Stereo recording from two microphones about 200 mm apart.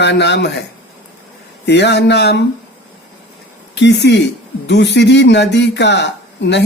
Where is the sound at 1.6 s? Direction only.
60° left (ahead or behind).